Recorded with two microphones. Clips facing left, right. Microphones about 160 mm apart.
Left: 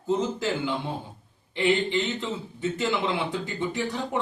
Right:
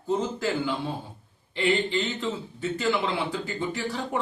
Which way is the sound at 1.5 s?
20° left (ahead or behind).